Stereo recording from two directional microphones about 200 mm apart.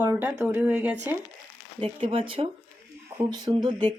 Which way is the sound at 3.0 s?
15° right (ahead or behind).